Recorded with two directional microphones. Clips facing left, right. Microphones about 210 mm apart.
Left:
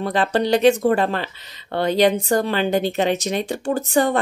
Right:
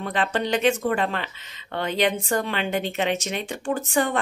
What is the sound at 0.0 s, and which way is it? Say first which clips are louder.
Speech: left 5 dB; 35° left (ahead or behind).